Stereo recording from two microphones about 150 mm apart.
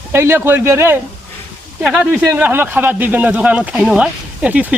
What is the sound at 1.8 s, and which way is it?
Speech, centre (ahead or behind).